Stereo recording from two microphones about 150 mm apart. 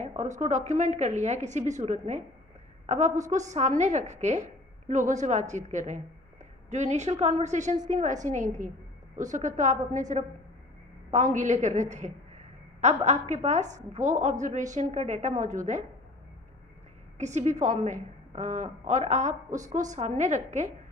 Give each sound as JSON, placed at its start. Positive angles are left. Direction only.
{"t": 0.0, "sound": "a woman's voice", "side_deg": -50}
{"t": 17.2, "sound": "a woman's voice", "side_deg": -50}